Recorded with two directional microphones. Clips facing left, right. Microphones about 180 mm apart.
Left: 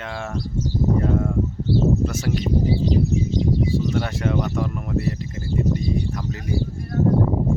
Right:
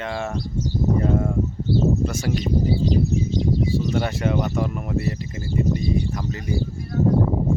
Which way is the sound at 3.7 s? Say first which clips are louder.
Even; centre (ahead or behind).